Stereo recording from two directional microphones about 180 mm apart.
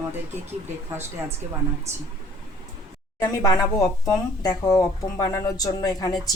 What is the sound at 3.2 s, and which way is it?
A woman's voice, 15° left (ahead or behind).